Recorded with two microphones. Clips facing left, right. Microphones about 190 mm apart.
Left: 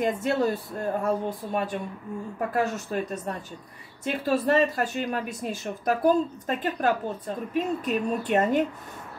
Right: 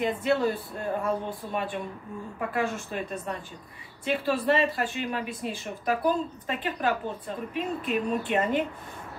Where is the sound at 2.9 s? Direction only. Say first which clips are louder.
Left 3 dB; 45° left (ahead or behind).